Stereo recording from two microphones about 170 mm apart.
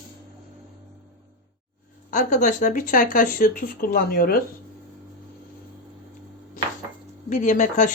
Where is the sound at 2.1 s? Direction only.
50° left (ahead or behind).